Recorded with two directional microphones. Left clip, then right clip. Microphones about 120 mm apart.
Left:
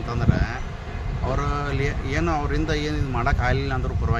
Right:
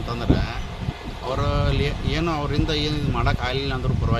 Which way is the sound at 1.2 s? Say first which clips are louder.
Right 2 dB; 5° right (ahead or behind).